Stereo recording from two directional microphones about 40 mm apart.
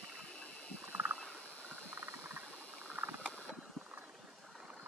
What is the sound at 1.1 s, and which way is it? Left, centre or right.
Wild animals, left.